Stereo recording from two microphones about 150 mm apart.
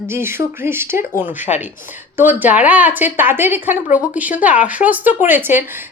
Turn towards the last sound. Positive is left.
turn(degrees=-15)  # may be behind; listen again after turning